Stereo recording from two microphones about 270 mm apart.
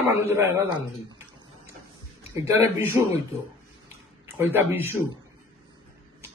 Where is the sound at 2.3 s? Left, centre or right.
Centre.